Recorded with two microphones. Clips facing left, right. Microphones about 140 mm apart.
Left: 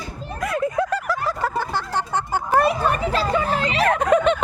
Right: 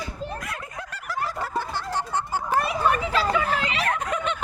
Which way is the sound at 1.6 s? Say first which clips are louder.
Left 4 dB; 90° left.